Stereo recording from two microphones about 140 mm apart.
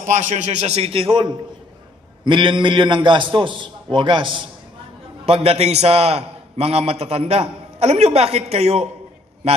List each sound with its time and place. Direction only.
0.0 s a man's voice: 60° right (ahead or behind)